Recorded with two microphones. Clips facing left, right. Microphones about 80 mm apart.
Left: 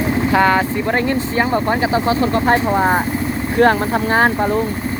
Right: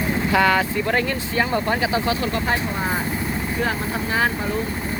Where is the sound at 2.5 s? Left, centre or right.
Left.